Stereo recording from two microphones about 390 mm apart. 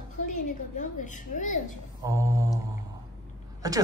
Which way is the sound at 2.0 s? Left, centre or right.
Centre.